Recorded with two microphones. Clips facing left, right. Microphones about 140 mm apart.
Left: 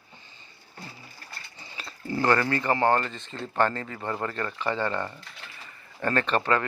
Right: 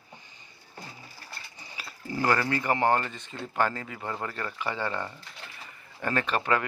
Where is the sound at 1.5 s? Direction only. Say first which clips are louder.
Left 1 dB; 10° right (ahead or behind).